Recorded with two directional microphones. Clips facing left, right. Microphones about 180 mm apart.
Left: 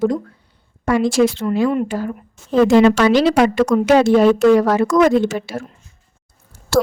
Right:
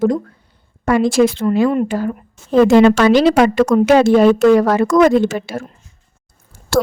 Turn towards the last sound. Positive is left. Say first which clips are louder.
# even
turn(degrees=-55)  # may be behind; listen again after turning